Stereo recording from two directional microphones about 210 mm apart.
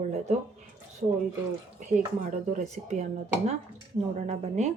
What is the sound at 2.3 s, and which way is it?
Speech, 35° right (ahead or behind).